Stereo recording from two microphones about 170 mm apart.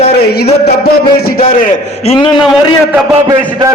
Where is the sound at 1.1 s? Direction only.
65° left (ahead or behind).